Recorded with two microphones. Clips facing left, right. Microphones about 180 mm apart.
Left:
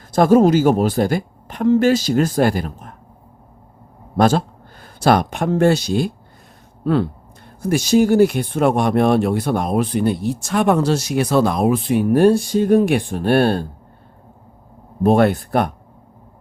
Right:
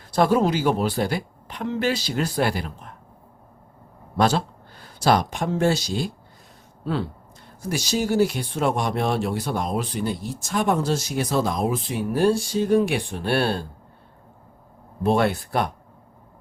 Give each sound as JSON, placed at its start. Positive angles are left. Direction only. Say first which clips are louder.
{"t": 0.1, "sound": "speech", "louder": "left 7 dB", "side_deg": 45}
{"t": 4.2, "sound": "speech", "louder": "left 5 dB", "side_deg": 50}
{"t": 7.6, "sound": "speech", "louder": "left 10 dB", "side_deg": 55}
{"t": 15.0, "sound": "speech", "louder": "left 6 dB", "side_deg": 50}